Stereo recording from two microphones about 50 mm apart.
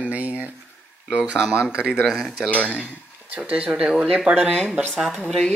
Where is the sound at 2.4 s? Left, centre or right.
Left.